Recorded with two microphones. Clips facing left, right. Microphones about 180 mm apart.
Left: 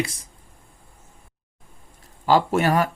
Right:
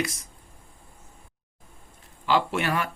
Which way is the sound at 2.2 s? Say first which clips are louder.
Left 6 dB; 40° left (ahead or behind).